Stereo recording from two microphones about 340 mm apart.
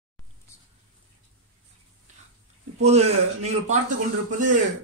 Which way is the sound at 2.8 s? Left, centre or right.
Centre.